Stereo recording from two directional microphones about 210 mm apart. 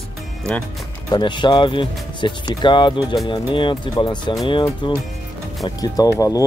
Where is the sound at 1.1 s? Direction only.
20° left (ahead or behind).